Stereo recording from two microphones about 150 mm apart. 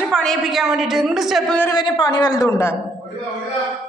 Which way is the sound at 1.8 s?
30° left (ahead or behind).